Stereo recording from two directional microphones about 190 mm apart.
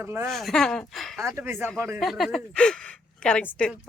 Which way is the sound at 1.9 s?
Centre (ahead or behind).